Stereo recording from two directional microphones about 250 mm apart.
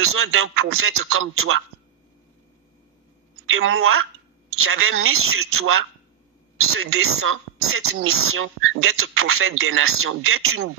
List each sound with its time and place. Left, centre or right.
0.1 s speech: right
3.4 s speech: right